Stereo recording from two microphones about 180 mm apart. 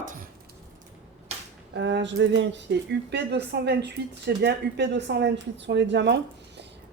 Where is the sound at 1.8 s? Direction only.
90° right.